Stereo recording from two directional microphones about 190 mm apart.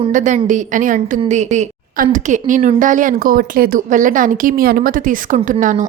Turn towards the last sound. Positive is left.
turn(degrees=-45)  # may be behind; listen again after turning